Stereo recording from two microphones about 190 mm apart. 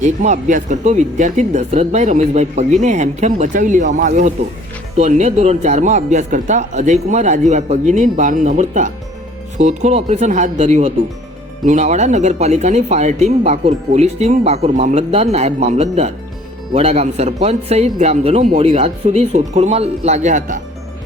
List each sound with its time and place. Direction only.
0.0 s speech: 40° right (ahead or behind)